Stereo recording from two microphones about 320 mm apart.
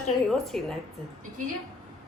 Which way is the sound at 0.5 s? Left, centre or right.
Centre.